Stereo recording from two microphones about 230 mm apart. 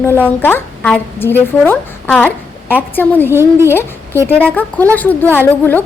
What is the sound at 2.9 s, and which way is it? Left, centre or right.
Speech, centre.